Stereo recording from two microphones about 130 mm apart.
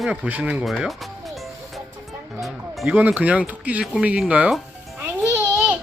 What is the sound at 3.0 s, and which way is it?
Speech, 10° right (ahead or behind).